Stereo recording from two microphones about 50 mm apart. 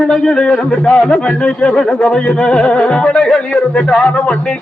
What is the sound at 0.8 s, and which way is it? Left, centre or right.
A man's voice, left.